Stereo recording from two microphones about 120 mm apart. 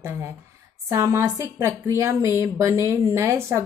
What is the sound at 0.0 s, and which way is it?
Speech, 20° right (ahead or behind).